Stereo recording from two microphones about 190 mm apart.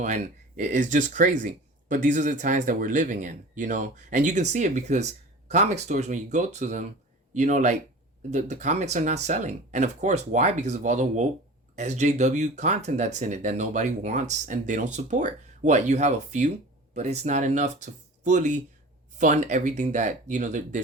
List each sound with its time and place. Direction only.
0.0 s speech: 40° right (ahead or behind)